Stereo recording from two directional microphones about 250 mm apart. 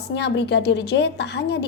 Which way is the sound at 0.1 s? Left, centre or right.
Left.